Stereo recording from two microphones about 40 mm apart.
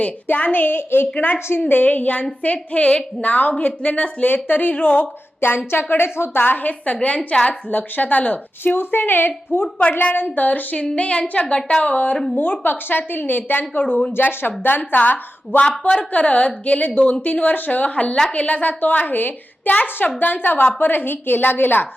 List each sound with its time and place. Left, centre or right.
0.3 s a woman's voice: left
0.6 s a woman's voice: left
1.5 s a woman's voice: left
5.4 s a woman's voice: left
6.4 s a woman's voice: left
7.7 s a woman's voice: left
8.6 s a woman's voice: left
10.0 s a woman's voice: left
10.9 s a woman's voice: left
12.4 s a woman's voice: left
15.9 s a woman's voice: left
20.1 s a woman's voice: left